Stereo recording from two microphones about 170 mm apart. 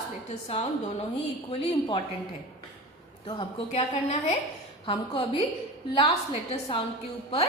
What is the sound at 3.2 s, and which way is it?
A woman's voice, 30° left (ahead or behind).